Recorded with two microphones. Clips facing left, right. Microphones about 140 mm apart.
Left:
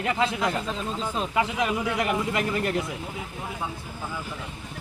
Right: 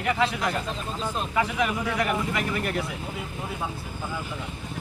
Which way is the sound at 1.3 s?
25° left (ahead or behind).